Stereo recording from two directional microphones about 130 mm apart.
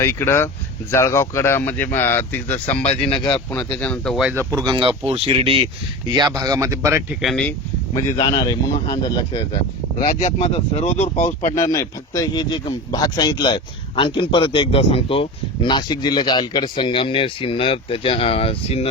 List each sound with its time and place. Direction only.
0.0 s speech: 20° left (ahead or behind)
3.1 s a man's voice: 35° left (ahead or behind)
3.5 s speech: 10° left (ahead or behind)
4.4 s speech: 30° right (ahead or behind); by 5.6 s 45° right (ahead or behind)
6.1 s speech: 35° right (ahead or behind)
7.1 s speech: centre (ahead or behind)
8.3 s a man's voice: 30° left (ahead or behind)
10.0 s speech: 70° left (ahead or behind)
11.5 s a man's voice: 25° left (ahead or behind); by 18.9 s 50° left (ahead or behind)